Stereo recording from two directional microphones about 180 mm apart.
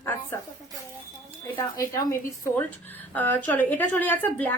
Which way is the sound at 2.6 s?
10° left (ahead or behind).